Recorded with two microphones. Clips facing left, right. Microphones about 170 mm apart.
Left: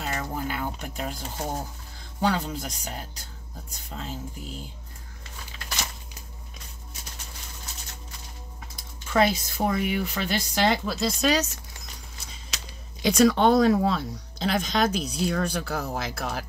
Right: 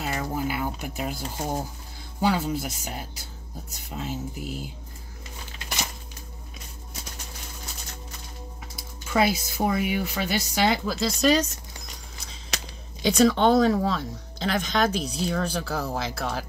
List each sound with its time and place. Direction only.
0.0 s speech: 5° right (ahead or behind)
8.7 s speech: 5° right (ahead or behind)
13.0 s speech: centre (ahead or behind)